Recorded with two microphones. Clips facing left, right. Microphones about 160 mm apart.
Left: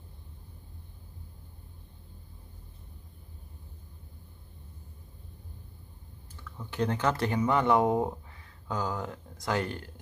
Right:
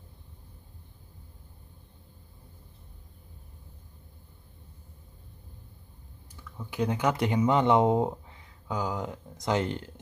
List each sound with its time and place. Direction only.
6.3 s speech: 10° right (ahead or behind)